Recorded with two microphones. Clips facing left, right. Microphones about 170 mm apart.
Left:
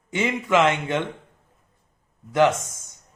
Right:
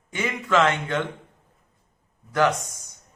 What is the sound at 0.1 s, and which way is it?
Speech, 20° left (ahead or behind).